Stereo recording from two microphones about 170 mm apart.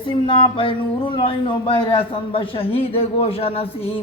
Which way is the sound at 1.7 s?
30° left (ahead or behind).